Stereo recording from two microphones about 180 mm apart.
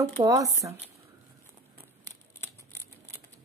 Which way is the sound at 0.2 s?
20° right (ahead or behind).